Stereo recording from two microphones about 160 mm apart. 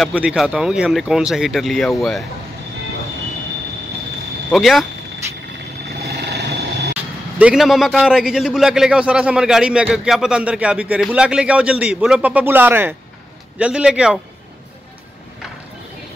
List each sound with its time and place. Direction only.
0.0 s a man's voice: 5° right (ahead or behind)
4.5 s a man's voice: centre (ahead or behind)
5.9 s vehicle: 85° right
7.3 s a man's voice: 5° right (ahead or behind)